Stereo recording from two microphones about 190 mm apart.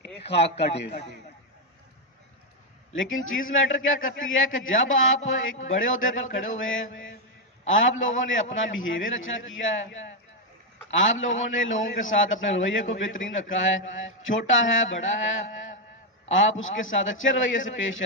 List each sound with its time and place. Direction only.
0.3 s a man's voice: 65° left (ahead or behind)
2.9 s a man's voice: 90° left
10.9 s a man's voice: 90° left